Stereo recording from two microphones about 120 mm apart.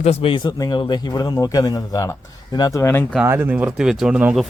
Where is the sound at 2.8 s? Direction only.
20° left (ahead or behind).